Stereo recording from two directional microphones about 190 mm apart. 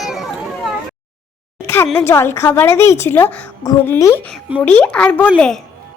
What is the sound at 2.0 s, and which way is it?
A woman's voice, 15° left (ahead or behind).